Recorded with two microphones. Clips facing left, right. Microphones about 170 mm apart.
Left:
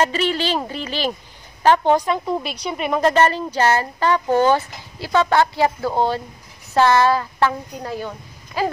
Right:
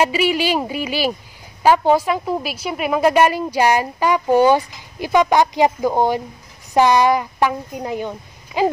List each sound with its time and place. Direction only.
0.0 s a woman's voice: 10° right (ahead or behind)